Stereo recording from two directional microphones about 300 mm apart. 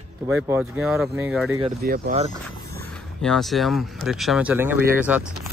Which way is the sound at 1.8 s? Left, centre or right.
Right.